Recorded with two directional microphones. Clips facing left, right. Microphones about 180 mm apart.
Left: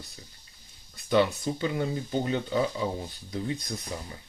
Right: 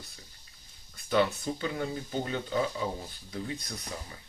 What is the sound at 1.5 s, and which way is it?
Speech, 20° left (ahead or behind).